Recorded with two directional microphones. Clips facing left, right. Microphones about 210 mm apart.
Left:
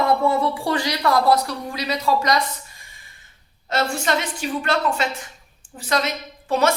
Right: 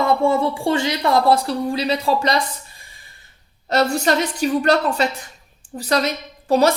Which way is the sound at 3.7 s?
40° right (ahead or behind).